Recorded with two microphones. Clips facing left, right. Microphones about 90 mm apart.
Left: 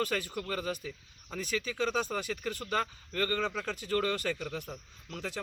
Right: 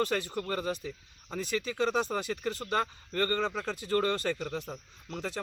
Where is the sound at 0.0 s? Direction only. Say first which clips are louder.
Right 3 dB; 20° right (ahead or behind).